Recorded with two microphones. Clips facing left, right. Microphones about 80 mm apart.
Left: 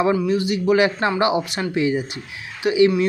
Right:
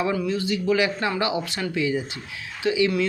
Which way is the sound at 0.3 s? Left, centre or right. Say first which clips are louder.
Left 4 dB; centre.